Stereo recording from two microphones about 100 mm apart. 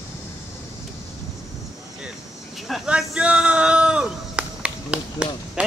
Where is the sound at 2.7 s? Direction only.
5° right (ahead or behind).